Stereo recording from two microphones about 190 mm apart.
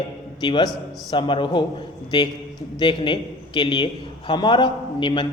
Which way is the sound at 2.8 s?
25° left (ahead or behind).